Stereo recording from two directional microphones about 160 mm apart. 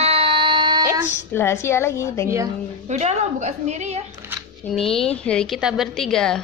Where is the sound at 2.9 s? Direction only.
45° right (ahead or behind).